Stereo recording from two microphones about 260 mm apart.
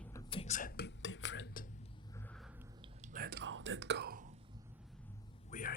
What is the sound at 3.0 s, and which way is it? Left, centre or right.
Whispering, right.